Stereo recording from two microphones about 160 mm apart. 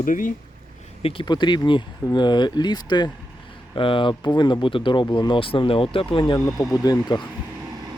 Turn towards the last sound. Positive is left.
turn(degrees=25)  # may be behind; listen again after turning